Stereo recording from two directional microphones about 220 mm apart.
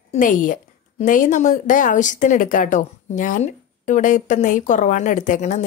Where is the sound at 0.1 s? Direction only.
35° left (ahead or behind).